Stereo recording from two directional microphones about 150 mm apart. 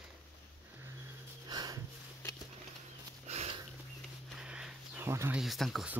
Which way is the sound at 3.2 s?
45° right (ahead or behind).